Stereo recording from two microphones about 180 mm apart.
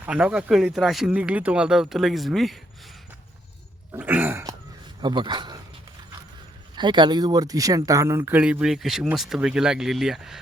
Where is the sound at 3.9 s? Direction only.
10° right (ahead or behind).